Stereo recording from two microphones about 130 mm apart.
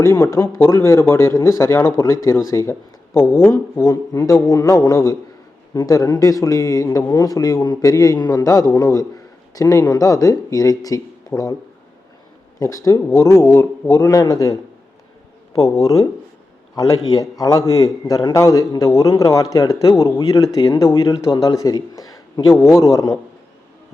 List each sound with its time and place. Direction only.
0.0 s a man's voice: 20° left (ahead or behind)
12.5 s a man's voice: 25° left (ahead or behind)
15.8 s a man's voice: 25° left (ahead or behind)